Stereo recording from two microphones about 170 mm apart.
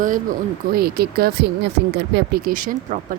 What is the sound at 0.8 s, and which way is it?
Speech, 65° right (ahead or behind).